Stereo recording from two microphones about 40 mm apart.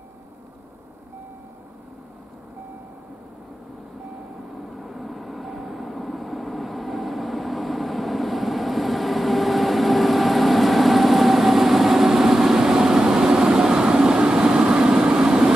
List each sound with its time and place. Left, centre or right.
4.6 s vehicle: centre